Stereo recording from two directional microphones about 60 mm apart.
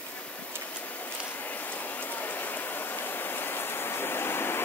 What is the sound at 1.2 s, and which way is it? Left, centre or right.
Rain, left.